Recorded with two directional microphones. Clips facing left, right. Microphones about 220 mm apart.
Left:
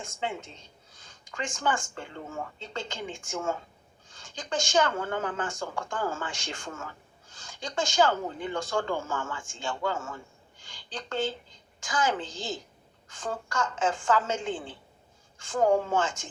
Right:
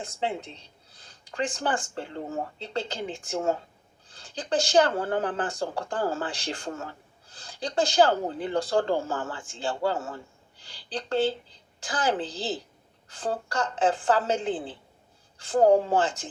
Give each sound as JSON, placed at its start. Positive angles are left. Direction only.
{"t": 0.0, "sound": "speech", "side_deg": -35}